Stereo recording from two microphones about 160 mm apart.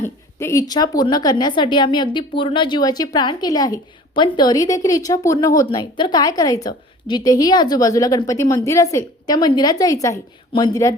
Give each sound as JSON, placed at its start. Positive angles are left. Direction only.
{"t": 0.0, "sound": "a woman's voice", "side_deg": 15}